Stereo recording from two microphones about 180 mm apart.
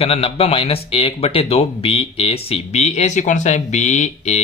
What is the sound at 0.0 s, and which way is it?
Speech, 35° left (ahead or behind).